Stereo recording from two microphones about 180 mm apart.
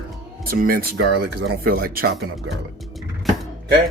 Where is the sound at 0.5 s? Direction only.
55° right (ahead or behind).